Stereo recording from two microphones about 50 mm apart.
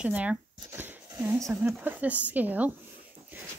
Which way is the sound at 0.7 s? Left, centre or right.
Right.